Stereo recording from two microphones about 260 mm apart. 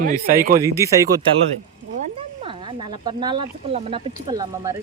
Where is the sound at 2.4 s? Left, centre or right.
Centre.